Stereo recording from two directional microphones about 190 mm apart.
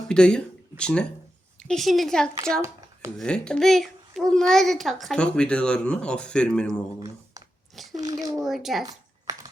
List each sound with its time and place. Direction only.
0.1 s a child's voice: 5° left (ahead or behind)
7.9 s speech: 20° right (ahead or behind)
8.4 s a child's voice: centre (ahead or behind)